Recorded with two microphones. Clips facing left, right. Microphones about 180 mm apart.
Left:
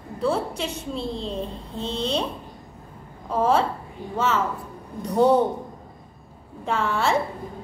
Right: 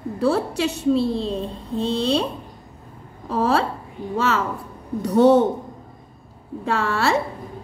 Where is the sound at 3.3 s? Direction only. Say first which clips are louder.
Right 1 dB; 75° right (ahead or behind).